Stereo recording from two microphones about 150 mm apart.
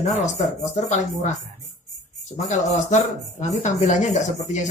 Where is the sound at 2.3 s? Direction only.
50° left (ahead or behind).